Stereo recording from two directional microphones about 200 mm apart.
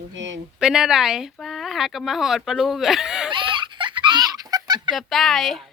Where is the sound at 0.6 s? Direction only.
5° right (ahead or behind).